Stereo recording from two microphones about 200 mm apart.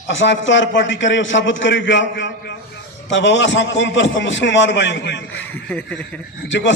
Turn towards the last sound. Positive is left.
turn(degrees=65)  # may be behind; listen again after turning